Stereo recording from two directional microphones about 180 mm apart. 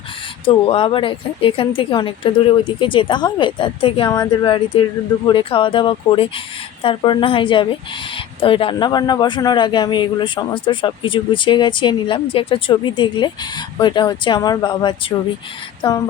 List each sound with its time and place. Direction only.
0.4 s a man's voice: 30° left (ahead or behind)